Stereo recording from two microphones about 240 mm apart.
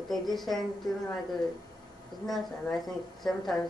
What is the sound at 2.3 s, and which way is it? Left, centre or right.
Speech, centre.